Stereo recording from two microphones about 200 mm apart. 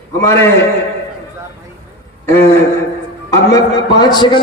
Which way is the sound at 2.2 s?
10° left (ahead or behind).